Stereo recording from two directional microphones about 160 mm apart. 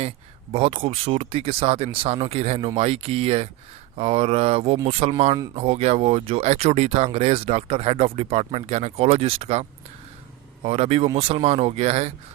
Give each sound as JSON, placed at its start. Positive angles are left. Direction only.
{"t": 0.5, "sound": "speech", "side_deg": -35}